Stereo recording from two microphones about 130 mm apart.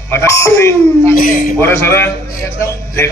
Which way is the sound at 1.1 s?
90° left.